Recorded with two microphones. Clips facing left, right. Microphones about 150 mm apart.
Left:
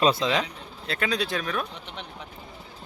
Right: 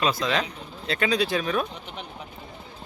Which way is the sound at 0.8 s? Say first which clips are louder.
Right 3 dB; centre (ahead or behind).